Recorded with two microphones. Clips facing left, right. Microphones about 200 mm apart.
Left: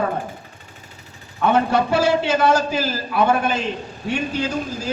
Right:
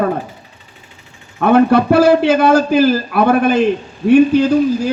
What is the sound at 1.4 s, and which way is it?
A man's voice, 60° right (ahead or behind).